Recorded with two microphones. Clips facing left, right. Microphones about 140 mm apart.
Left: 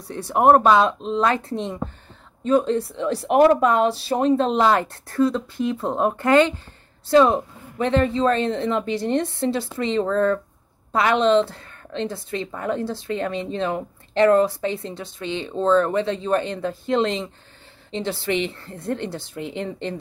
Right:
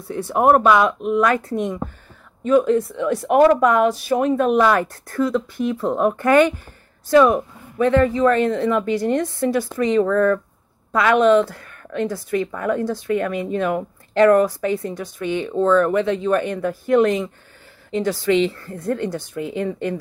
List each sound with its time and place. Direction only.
0.1 s speech: 30° left (ahead or behind)